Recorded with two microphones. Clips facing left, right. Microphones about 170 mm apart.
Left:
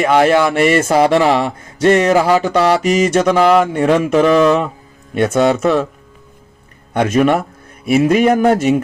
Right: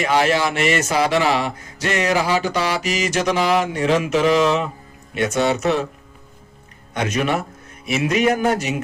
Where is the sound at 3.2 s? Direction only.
55° left (ahead or behind).